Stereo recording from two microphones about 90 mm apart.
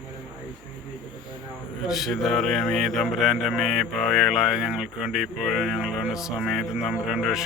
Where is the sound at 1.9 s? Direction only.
Centre (ahead or behind).